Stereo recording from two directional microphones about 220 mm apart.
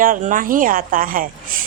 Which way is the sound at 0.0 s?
35° right (ahead or behind).